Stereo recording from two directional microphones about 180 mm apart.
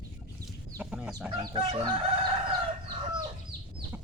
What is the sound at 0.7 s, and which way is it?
Chicken, 5° right (ahead or behind).